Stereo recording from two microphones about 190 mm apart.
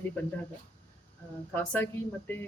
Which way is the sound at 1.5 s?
10° left (ahead or behind).